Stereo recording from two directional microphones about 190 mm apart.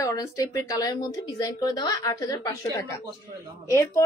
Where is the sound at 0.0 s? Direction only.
15° left (ahead or behind).